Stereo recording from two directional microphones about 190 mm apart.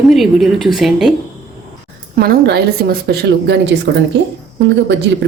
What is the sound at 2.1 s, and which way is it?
Speech, 55° right (ahead or behind).